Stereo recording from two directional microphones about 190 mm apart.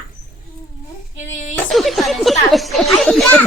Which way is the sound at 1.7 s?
Centre (ahead or behind).